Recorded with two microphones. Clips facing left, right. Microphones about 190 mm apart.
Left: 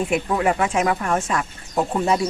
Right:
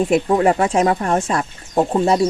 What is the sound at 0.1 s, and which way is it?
Speech, 35° right (ahead or behind).